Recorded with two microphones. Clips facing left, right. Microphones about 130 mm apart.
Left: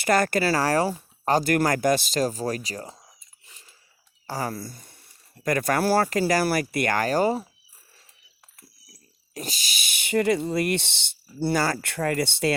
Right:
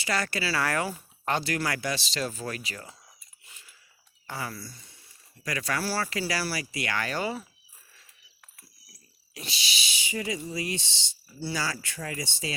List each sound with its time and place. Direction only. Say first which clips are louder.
0.0 s speech: left 9 dB; 50° left (ahead or behind)
0.6 s speech: left 6 dB; 35° left (ahead or behind)
3.4 s a sound: left 1 dB; 35° left (ahead or behind)
4.3 s speech: left 7 dB; 40° left (ahead or behind)
9.3 s speech: left 3 dB; 45° left (ahead or behind); by 12.5 s 65° left (ahead or behind)